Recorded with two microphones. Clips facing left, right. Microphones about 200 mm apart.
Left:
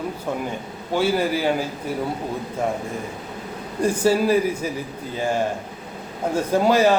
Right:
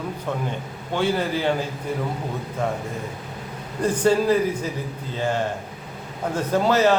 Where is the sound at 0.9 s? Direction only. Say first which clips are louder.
Left 2 dB; 10° left (ahead or behind).